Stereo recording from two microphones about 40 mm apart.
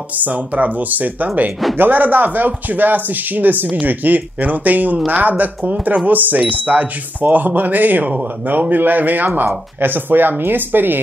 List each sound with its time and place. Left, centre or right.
0.2 s speech: right